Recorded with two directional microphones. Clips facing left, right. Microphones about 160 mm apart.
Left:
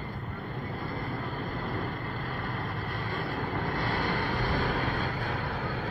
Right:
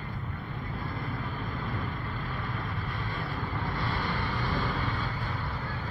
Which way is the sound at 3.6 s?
50° left (ahead or behind).